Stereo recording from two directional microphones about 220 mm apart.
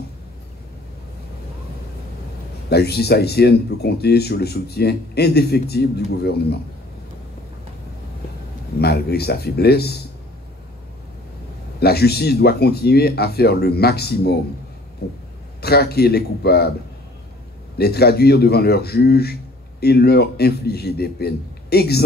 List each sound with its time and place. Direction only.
2.7 s speech: 45° left (ahead or behind)
8.7 s speech: 45° left (ahead or behind)
11.8 s speech: 45° left (ahead or behind)
17.7 s speech: 45° left (ahead or behind)